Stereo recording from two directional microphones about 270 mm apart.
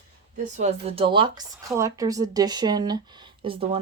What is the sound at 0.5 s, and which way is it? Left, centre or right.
Speech, right.